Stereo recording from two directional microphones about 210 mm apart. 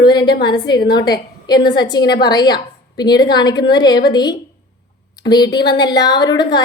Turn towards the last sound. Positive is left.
turn(degrees=20)  # may be behind; listen again after turning